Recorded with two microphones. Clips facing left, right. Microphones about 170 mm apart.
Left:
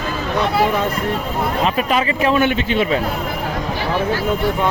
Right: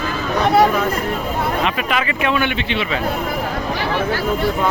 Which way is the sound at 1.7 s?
35° left (ahead or behind).